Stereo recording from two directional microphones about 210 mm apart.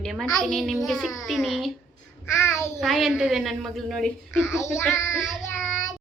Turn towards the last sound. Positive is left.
turn(degrees=0)  # may be behind; listen again after turning